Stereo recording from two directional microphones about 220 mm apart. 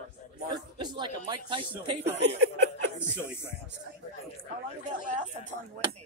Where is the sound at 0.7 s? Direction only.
20° right (ahead or behind).